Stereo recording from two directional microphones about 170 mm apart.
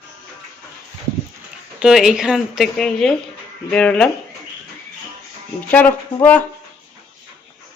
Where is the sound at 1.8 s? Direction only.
5° right (ahead or behind).